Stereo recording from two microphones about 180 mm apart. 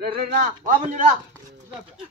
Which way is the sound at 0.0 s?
55° right (ahead or behind).